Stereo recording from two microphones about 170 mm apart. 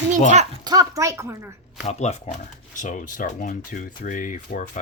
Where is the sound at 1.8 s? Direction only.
40° left (ahead or behind).